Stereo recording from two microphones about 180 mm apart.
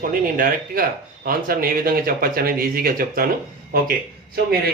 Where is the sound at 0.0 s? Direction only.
50° right (ahead or behind).